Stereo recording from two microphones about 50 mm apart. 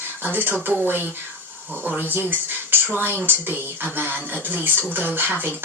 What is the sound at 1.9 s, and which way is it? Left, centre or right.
Speech, right.